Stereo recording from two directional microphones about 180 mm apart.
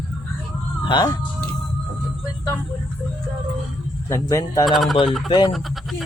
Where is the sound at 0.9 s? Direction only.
25° left (ahead or behind).